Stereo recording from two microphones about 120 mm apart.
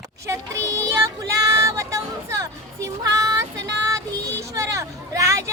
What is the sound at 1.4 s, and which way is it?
Speech, 25° right (ahead or behind).